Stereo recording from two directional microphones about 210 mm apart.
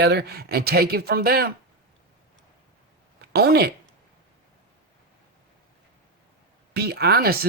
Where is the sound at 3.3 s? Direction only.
50° right (ahead or behind).